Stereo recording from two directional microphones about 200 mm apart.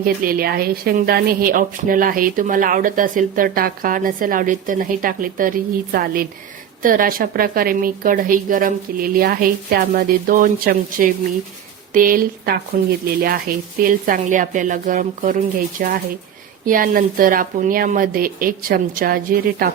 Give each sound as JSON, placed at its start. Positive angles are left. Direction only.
{"t": 0.0, "sound": "a woman's voice", "side_deg": -45}